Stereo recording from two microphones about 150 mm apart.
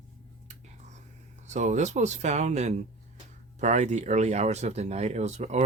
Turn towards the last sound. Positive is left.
turn(degrees=-50)  # may be behind; listen again after turning